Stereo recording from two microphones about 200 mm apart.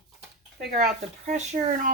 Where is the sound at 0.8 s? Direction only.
40° right (ahead or behind).